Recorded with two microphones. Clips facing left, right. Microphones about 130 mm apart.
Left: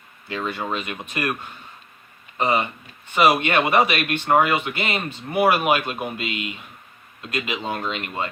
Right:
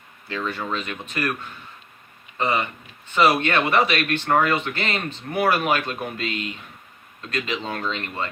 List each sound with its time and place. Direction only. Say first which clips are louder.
0.3 s speech: left 1 dB; 15° left (ahead or behind)